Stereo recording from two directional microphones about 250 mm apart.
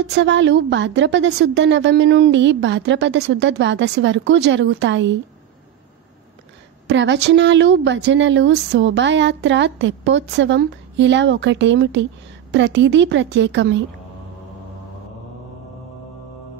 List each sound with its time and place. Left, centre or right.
0.1 s a woman's voice: right
6.9 s a woman's voice: right